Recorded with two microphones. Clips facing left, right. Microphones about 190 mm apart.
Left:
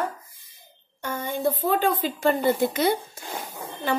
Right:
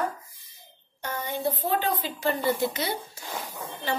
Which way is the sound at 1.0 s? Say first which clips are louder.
Left 3 dB; 50° left (ahead or behind).